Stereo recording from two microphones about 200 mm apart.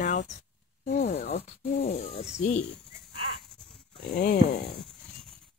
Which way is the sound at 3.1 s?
25° right (ahead or behind).